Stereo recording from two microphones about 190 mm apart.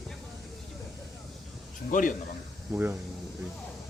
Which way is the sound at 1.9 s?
45° left (ahead or behind).